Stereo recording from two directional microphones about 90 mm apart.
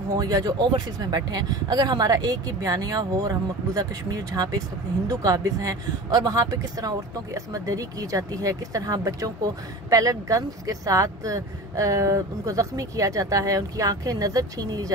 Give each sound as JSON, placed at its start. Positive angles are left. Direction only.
{"t": 0.1, "sound": "speech", "side_deg": -45}